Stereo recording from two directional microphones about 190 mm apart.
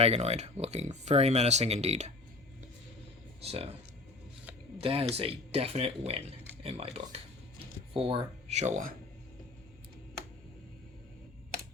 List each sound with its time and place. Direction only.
0.0 s speech: 35° right (ahead or behind)
3.4 s speech: 30° right (ahead or behind)
4.8 s speech: 30° right (ahead or behind)